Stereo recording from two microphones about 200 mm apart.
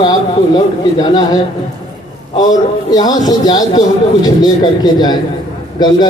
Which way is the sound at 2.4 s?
20° left (ahead or behind).